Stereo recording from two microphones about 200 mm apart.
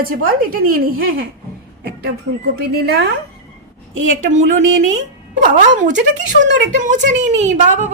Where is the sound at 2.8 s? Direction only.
55° right (ahead or behind).